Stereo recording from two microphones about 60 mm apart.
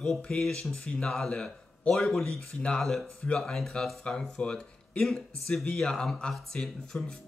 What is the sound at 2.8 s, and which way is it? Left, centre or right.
Speech, centre.